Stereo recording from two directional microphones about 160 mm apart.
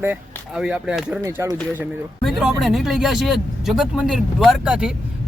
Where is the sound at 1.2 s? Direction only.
15° right (ahead or behind).